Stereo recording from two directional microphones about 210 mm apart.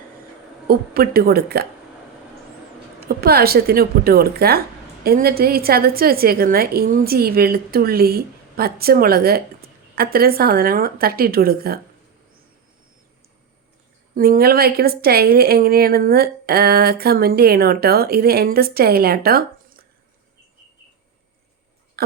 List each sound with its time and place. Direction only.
0.7 s a woman's voice: 45° right (ahead or behind)
3.0 s a woman's voice: 45° right (ahead or behind)
14.2 s a woman's voice: 45° right (ahead or behind)
22.0 s a sound: 45° right (ahead or behind)